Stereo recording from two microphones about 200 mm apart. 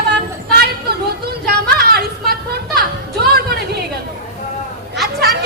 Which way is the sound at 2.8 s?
50° right (ahead or behind).